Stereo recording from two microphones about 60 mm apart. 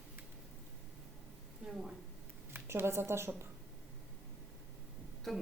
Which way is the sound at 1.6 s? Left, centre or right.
Centre.